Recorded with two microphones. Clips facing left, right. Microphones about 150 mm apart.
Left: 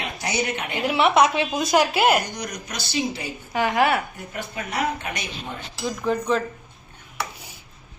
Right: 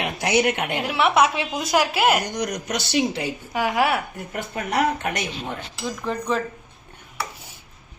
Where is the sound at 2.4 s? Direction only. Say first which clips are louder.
Right 6 dB; 80° right.